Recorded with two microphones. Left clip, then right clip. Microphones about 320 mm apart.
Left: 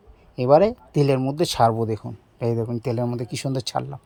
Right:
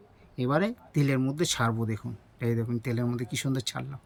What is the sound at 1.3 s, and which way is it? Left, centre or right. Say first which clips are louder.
Speech: left 9 dB; centre.